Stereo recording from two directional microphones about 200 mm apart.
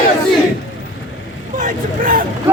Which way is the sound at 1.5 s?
40° right (ahead or behind).